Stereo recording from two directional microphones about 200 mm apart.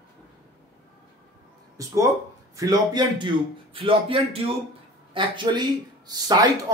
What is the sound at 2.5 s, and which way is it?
Speech, 20° right (ahead or behind).